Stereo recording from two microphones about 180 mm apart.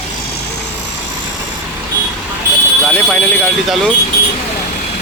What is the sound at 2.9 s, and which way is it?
Speech, 5° left (ahead or behind).